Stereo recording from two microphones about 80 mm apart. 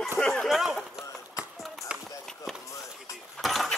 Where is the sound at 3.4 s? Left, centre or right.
Centre.